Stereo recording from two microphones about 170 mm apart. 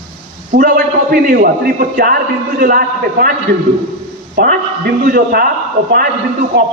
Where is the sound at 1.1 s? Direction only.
65° right (ahead or behind).